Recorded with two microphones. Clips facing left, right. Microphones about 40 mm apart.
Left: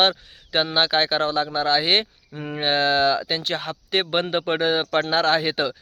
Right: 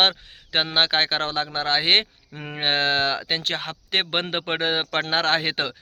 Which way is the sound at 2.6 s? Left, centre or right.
Right.